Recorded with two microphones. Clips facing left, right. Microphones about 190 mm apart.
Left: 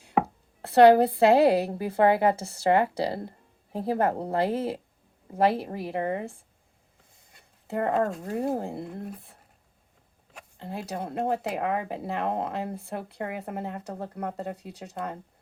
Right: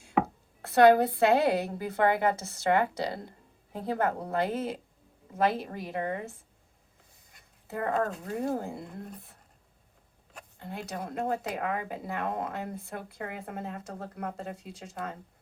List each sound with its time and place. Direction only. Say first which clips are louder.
0.6 s a woman's voice: left 3 dB; 35° left (ahead or behind)
7.8 s a woman's voice: left 4 dB; 30° left (ahead or behind)
10.6 s speech: left 4 dB; 30° left (ahead or behind)